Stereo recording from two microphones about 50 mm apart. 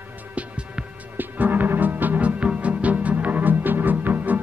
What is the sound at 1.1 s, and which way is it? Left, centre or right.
Music, right.